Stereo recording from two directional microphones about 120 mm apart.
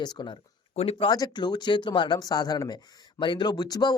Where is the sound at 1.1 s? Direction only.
35° left (ahead or behind).